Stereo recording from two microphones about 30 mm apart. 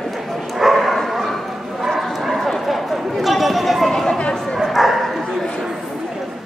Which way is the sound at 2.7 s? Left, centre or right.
Centre.